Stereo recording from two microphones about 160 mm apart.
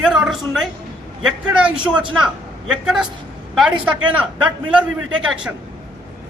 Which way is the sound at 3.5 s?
5° right (ahead or behind).